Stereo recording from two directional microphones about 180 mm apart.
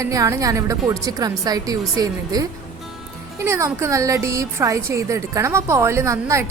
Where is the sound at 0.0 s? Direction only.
20° right (ahead or behind).